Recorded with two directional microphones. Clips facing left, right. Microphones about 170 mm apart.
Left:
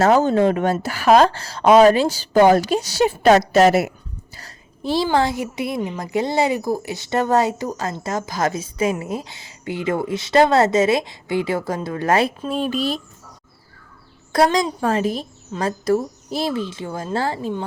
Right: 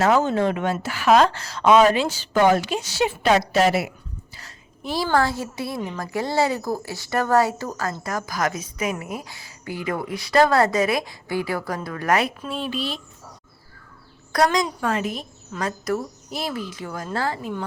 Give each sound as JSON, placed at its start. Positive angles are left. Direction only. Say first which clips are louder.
{"t": 0.0, "sound": "speech", "louder": "left 4 dB", "side_deg": 40}
{"t": 4.4, "sound": "a sound", "louder": "left 5 dB", "side_deg": 35}
{"t": 5.0, "sound": "a woman's voice", "louder": "right 2 dB", "side_deg": 20}
{"t": 12.5, "sound": "speech", "louder": "left 6 dB", "side_deg": 45}
{"t": 14.3, "sound": "a woman's voice", "louder": "left 3 dB", "side_deg": 30}